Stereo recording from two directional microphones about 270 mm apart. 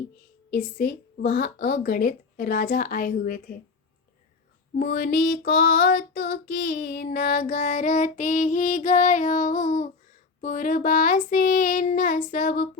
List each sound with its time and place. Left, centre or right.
0.5 s child singing: left
4.7 s child singing: left